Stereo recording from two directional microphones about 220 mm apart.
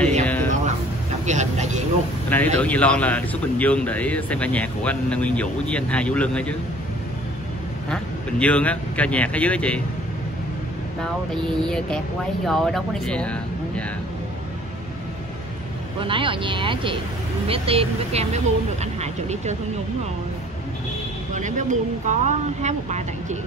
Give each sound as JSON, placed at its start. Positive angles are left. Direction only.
{"t": 0.2, "sound": "a sound", "side_deg": 5}
{"t": 1.2, "sound": "vehicle", "side_deg": -30}
{"t": 2.2, "sound": "a man's voice", "side_deg": 10}
{"t": 7.9, "sound": "a man's voice", "side_deg": 5}
{"t": 11.4, "sound": "speech", "side_deg": 5}
{"t": 16.0, "sound": "speech", "side_deg": -25}
{"t": 21.3, "sound": "speech", "side_deg": -35}